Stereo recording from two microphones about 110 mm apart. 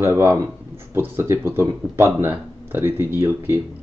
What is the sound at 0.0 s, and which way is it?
Speech, 20° right (ahead or behind).